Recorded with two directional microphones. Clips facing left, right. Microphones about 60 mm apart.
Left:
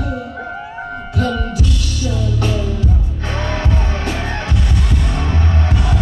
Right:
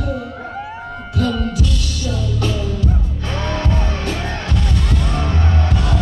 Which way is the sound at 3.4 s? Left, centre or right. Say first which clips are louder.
Right 1 dB; left.